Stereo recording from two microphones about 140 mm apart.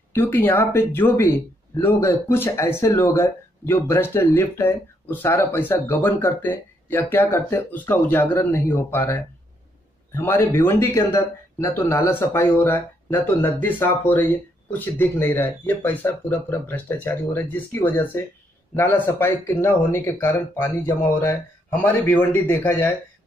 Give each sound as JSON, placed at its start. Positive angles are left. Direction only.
{"t": 0.1, "sound": "speech", "side_deg": 15}